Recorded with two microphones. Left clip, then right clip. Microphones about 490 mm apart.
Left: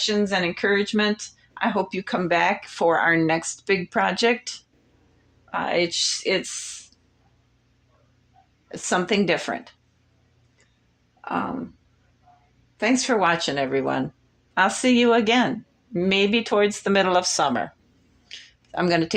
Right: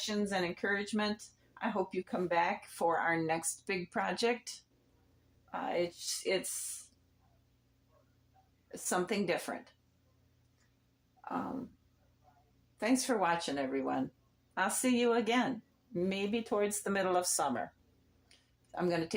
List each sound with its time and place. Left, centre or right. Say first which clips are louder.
0.0 s a woman's voice: left 13 dB; centre
8.7 s speech: left 12 dB; centre
12.7 s speech: left 11 dB; centre
18.3 s a sound: left 15 dB; centre